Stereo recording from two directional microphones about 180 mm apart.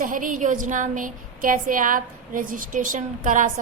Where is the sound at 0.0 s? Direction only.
50° right (ahead or behind).